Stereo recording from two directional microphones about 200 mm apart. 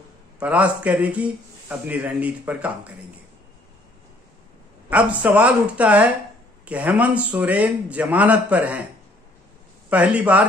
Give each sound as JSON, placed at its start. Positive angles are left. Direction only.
{"t": 0.4, "sound": "speech", "side_deg": -5}
{"t": 4.8, "sound": "speech", "side_deg": -5}
{"t": 9.8, "sound": "speech", "side_deg": -5}